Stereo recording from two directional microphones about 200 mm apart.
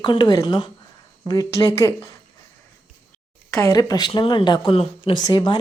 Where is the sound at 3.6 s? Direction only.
20° left (ahead or behind).